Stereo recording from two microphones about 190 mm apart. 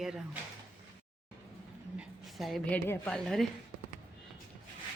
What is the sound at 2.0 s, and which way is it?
A woman's voice, centre (ahead or behind).